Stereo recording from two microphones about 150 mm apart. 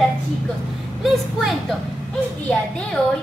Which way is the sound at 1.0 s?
Centre (ahead or behind).